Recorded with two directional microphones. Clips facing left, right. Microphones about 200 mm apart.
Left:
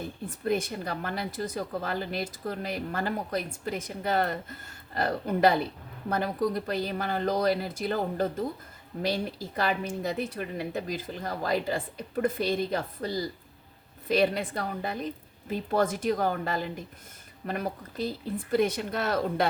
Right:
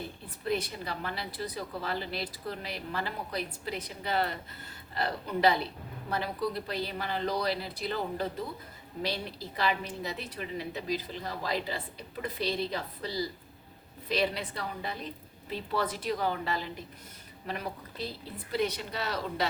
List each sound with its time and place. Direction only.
0.3 s a woman's voice: 45° left (ahead or behind)